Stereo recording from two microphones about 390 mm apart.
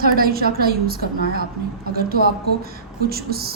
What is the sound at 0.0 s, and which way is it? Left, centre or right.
A woman's voice, right.